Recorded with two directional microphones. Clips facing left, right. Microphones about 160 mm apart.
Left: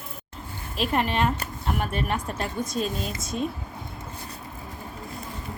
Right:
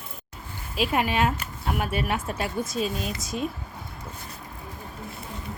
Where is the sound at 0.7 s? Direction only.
5° right (ahead or behind).